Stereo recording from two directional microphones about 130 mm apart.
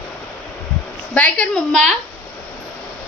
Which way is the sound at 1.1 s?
10° left (ahead or behind).